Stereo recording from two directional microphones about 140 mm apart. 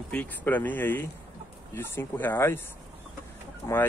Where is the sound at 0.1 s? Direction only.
10° left (ahead or behind).